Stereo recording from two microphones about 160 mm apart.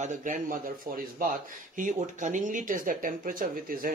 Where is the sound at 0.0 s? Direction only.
55° right (ahead or behind).